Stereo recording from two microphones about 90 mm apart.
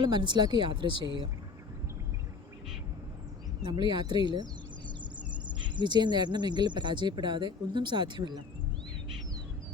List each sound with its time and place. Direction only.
0.0 s speech: 55° right (ahead or behind)
3.7 s speech: 55° right (ahead or behind)
5.5 s speech: 60° right (ahead or behind)